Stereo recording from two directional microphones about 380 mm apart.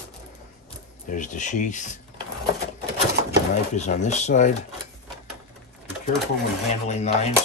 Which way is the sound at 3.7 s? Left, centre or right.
Centre.